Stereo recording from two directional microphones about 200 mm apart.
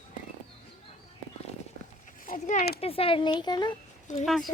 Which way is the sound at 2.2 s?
40° left (ahead or behind).